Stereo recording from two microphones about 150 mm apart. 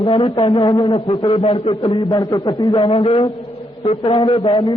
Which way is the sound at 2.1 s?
25° left (ahead or behind).